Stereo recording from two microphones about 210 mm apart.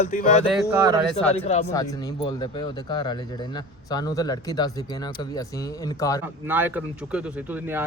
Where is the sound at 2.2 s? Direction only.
20° left (ahead or behind).